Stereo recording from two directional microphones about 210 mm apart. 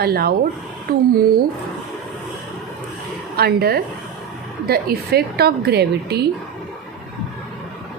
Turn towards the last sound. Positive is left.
turn(degrees=-50)  # may be behind; listen again after turning